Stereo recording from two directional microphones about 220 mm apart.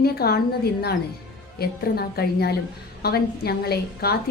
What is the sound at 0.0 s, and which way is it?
A woman's voice, 45° left (ahead or behind).